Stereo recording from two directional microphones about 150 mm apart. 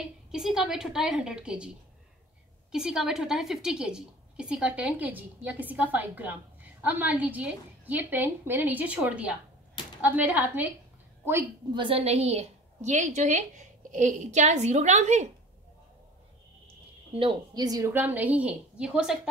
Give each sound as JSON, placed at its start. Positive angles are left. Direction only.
{"t": 0.3, "sound": "a woman's voice", "side_deg": -5}
{"t": 2.7, "sound": "a woman's voice", "side_deg": -5}
{"t": 11.7, "sound": "a woman's voice", "side_deg": -35}
{"t": 17.1, "sound": "a woman's voice", "side_deg": -35}
{"t": 17.9, "sound": "a woman's voice", "side_deg": -10}